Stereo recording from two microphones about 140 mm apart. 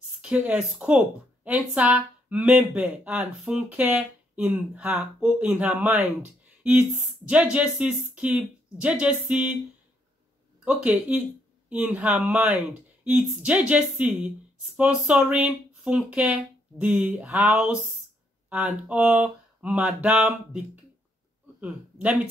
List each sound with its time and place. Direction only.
0.2 s speech: 10° right (ahead or behind)
10.6 s a man's voice: 10° right (ahead or behind)